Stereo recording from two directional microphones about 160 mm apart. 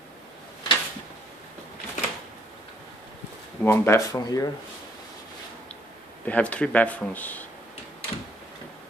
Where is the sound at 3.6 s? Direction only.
15° left (ahead or behind).